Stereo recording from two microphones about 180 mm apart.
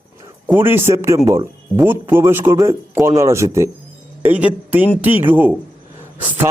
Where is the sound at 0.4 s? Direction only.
10° right (ahead or behind).